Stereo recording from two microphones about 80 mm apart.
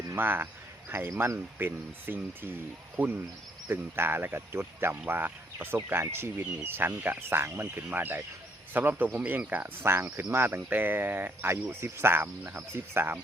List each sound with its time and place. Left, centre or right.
0.1 s speech: right
1.5 s speech: right
3.7 s speech: right